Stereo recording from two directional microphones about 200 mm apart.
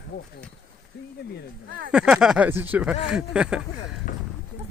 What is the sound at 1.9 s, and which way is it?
Speech, 5° right (ahead or behind).